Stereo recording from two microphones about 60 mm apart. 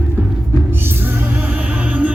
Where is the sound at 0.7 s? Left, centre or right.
Right.